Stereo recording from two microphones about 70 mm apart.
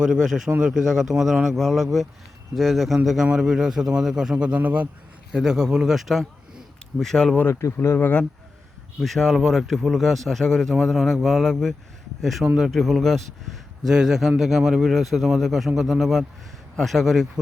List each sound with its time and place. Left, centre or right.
0.0 s a man's voice: centre
5.3 s a man's voice: centre
7.4 s speech: left
7.9 s speech: left
9.0 s a man's voice: centre